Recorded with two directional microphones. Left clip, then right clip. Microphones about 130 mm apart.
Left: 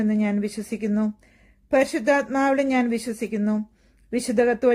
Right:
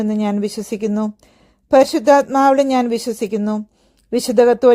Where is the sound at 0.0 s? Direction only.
50° right (ahead or behind).